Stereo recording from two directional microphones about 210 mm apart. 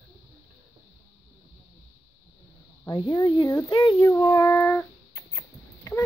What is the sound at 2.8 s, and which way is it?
Speech, 15° left (ahead or behind).